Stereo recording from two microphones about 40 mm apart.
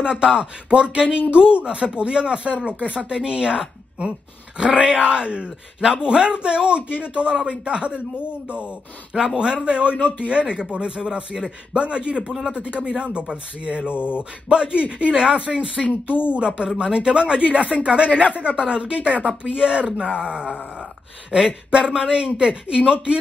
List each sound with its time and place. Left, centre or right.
0.0 s a woman's voice: right
9.1 s speech: centre
9.9 s speech: left
10.5 s speech: right